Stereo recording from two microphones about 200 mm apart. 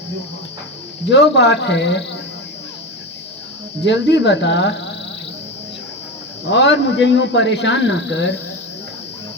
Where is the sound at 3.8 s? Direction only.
60° left (ahead or behind).